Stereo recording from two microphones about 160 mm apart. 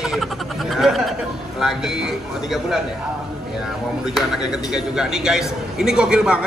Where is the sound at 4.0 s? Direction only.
5° right (ahead or behind).